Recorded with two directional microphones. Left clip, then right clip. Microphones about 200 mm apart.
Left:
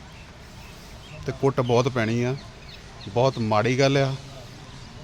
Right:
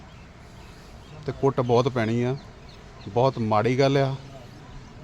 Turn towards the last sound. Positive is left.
turn(degrees=-10)  # may be behind; listen again after turning